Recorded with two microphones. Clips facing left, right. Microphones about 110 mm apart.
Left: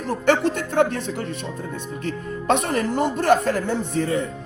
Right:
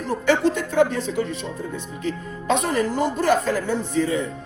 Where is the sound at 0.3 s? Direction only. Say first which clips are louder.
Even; 55° left (ahead or behind).